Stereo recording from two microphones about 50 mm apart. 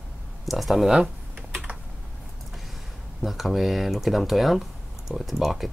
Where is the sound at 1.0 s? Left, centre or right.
Right.